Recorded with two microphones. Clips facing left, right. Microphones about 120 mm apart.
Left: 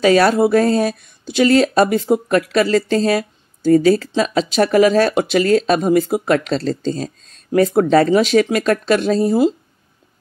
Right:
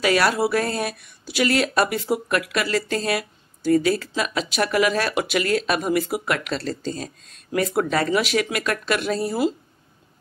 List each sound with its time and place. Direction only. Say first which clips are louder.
0.0 s speech: left 7 dB; 30° left (ahead or behind)